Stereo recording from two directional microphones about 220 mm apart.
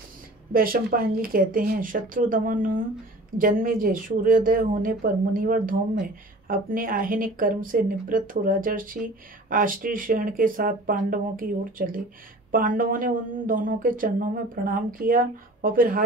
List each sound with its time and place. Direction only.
0.5 s speech: 40° right (ahead or behind)